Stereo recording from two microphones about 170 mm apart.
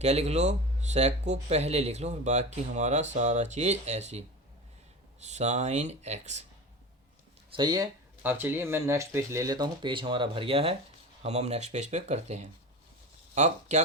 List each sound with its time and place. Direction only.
0.0 s speech: 40° right (ahead or behind)
5.2 s speech: 40° right (ahead or behind)
7.5 s speech: 25° right (ahead or behind)
8.2 s speech: 10° right (ahead or behind); by 13.8 s 45° right (ahead or behind)